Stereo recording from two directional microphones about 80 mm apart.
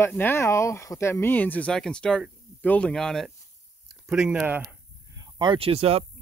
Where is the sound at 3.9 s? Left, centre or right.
Centre.